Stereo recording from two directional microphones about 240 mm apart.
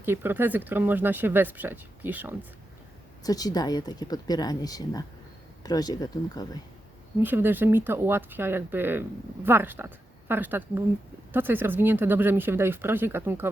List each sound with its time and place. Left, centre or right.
0.0 s speech: centre
3.2 s speech: centre
7.2 s speech: centre